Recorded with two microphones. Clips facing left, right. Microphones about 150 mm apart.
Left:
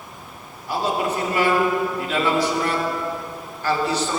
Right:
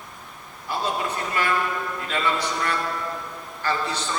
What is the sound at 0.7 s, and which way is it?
Speech, 10° left (ahead or behind).